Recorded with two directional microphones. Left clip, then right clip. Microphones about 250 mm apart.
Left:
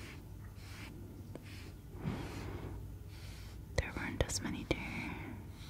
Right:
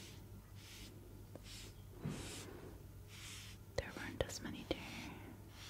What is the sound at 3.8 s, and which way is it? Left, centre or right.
Whispering, left.